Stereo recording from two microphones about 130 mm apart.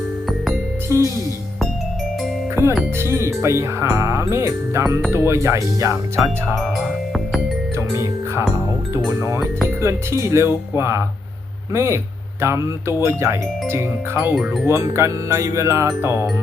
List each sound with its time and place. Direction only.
0.9 s speech: 20° right (ahead or behind)
2.6 s speech: 20° right (ahead or behind)
6.5 s speech: centre (ahead or behind)
9.8 s speech: 20° right (ahead or behind)
14.6 s speech: 20° right (ahead or behind)